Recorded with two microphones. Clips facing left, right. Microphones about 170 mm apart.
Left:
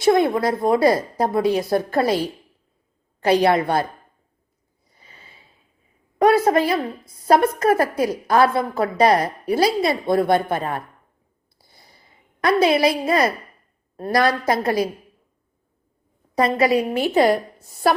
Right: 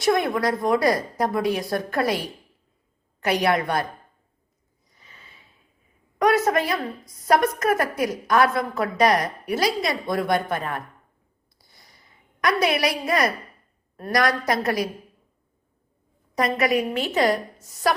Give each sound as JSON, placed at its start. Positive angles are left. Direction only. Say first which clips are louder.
{"t": 0.0, "sound": "a woman's voice", "louder": "left 4 dB", "side_deg": 25}
{"t": 4.9, "sound": "a sound", "louder": "left 2 dB", "side_deg": 30}
{"t": 6.1, "sound": "a woman's voice", "louder": "left 4 dB", "side_deg": 30}
{"t": 11.5, "sound": "a sound", "louder": "left 3 dB", "side_deg": 30}
{"t": 13.9, "sound": "a woman's voice", "louder": "left 3 dB", "side_deg": 30}
{"t": 16.3, "sound": "a woman's voice", "louder": "left 4 dB", "side_deg": 30}